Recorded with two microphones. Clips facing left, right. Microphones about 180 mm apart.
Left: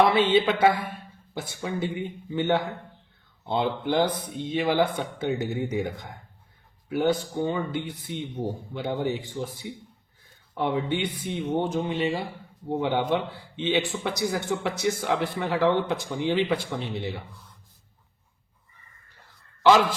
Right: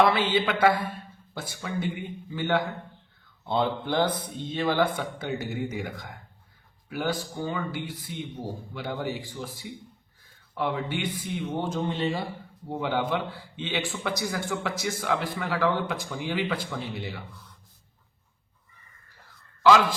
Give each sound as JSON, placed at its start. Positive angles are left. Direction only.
{"t": 0.0, "sound": "speech", "side_deg": 20}